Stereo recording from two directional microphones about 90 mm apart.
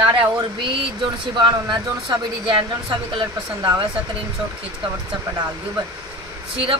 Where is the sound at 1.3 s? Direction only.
60° right (ahead or behind).